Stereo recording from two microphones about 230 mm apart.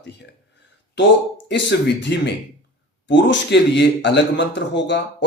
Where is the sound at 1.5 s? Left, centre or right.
Left.